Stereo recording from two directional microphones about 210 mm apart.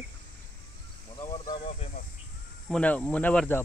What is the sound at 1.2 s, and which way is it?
Snake, 20° left (ahead or behind).